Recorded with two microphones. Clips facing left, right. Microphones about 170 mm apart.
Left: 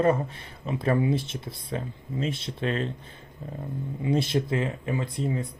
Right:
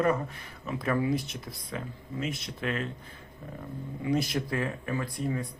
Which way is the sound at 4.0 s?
25° left (ahead or behind).